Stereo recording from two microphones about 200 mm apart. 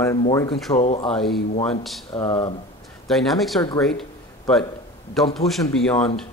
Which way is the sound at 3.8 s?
5° left (ahead or behind).